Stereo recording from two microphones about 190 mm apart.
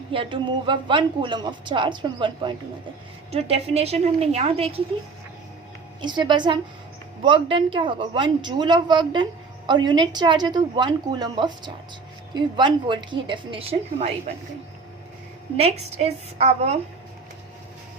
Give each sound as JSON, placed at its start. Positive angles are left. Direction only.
{"t": 0.1, "sound": "a woman's voice", "side_deg": -25}
{"t": 6.0, "sound": "speech", "side_deg": -25}
{"t": 15.5, "sound": "a woman's voice", "side_deg": -35}